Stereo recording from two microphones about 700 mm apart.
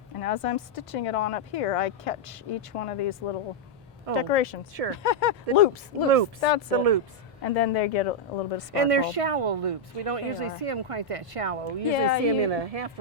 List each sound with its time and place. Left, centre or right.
0.2 s speech: left
4.1 s speech: left
6.7 s a woman's voice: right
7.4 s speech: left
8.7 s a woman's voice: right